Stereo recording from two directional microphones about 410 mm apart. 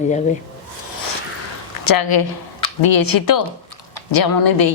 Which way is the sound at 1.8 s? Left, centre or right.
Left.